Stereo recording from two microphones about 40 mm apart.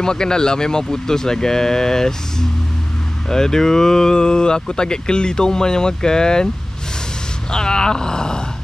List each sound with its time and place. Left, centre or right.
0.0 s speech: centre
3.3 s speech: centre
7.5 s speech: centre